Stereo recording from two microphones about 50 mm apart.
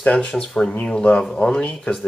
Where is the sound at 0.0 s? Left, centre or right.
Left.